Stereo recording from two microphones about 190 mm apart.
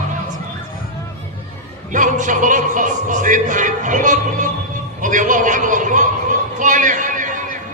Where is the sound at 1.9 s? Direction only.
40° right (ahead or behind).